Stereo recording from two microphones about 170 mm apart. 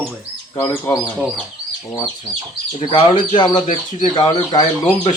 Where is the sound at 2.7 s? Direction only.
30° left (ahead or behind).